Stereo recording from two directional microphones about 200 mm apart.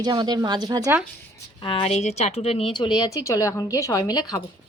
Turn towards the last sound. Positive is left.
turn(degrees=20)  # may be behind; listen again after turning